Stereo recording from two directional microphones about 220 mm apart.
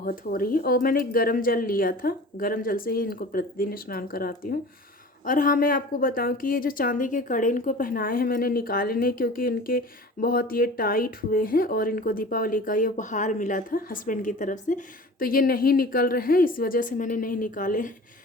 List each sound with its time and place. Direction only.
0.0 s a woman's voice: 40° left (ahead or behind)